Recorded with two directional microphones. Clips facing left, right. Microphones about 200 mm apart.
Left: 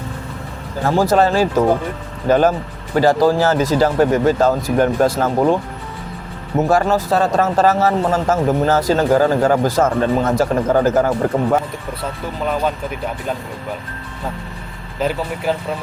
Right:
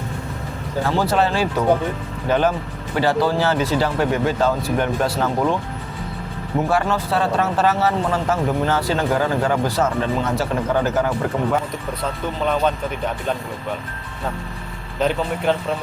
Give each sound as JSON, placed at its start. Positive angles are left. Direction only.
{"t": 0.9, "sound": "speech", "side_deg": 45}
{"t": 6.6, "sound": "speech", "side_deg": 45}
{"t": 14.9, "sound": "speech", "side_deg": 5}